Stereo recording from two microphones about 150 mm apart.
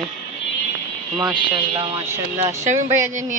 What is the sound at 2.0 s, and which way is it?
Speech, 15° right (ahead or behind).